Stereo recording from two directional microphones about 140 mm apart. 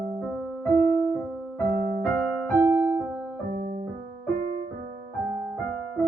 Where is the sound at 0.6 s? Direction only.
5° left (ahead or behind).